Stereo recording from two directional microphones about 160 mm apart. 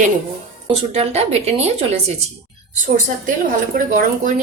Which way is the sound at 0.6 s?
40° right (ahead or behind).